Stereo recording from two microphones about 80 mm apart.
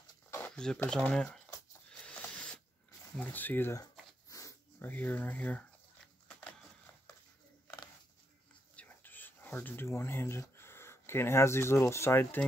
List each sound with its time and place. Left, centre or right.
0.5 s a sound: centre
1.1 s speech: centre
1.9 s a sound: centre
3.2 s speech: left
4.3 s dog: left
4.7 s speech: left
6.2 s a sound: centre
8.7 s whispering: left
9.8 s speech: left